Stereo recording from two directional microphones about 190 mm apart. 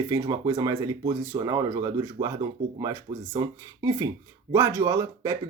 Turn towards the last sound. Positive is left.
turn(degrees=-15)  # may be behind; listen again after turning